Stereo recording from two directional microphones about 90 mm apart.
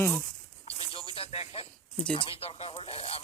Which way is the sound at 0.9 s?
85° left.